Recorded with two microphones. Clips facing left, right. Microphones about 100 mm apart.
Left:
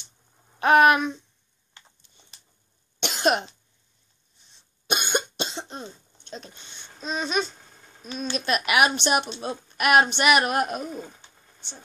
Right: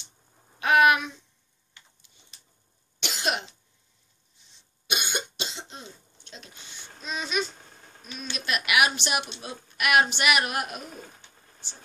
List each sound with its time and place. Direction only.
0.6 s speech: 40° left (ahead or behind)
3.0 s cough: 45° left (ahead or behind)
5.1 s cough: 45° left (ahead or behind)
7.0 s speech: 35° left (ahead or behind)